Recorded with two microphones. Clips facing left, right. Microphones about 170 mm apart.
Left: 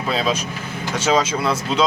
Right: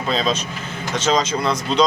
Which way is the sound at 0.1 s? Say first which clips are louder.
Even; 10° left (ahead or behind).